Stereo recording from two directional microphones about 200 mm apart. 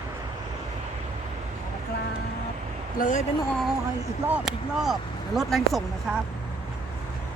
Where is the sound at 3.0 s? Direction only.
40° left (ahead or behind).